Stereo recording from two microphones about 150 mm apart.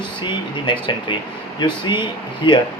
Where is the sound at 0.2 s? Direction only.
30° left (ahead or behind).